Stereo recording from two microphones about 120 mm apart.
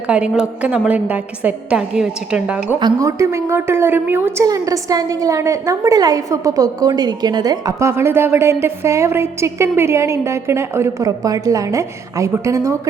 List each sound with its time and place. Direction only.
0.1 s a woman's voice: 10° right (ahead or behind)
3.0 s a woman's voice: 25° right (ahead or behind)
4.4 s a woman's voice: 30° right (ahead or behind)